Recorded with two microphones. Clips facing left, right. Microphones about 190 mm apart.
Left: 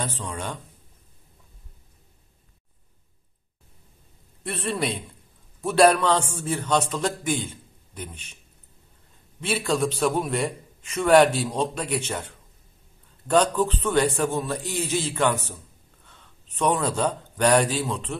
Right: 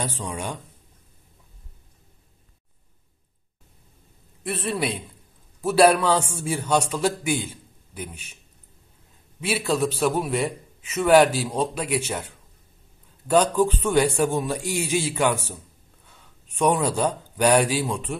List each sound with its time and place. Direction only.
0.0 s a man's voice: 15° right (ahead or behind)
4.4 s a man's voice: 5° right (ahead or behind)
9.4 s a man's voice: 5° right (ahead or behind)